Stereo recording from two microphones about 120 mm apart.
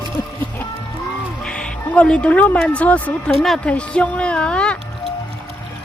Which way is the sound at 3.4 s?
5° left (ahead or behind).